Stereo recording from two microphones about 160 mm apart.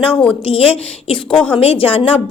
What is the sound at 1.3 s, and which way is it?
Speech, 5° left (ahead or behind).